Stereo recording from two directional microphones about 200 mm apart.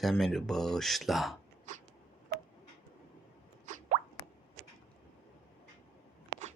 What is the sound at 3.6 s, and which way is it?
Plop, 40° right (ahead or behind).